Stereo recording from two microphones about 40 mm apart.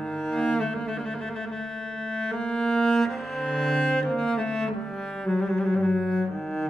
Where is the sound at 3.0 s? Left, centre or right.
Centre.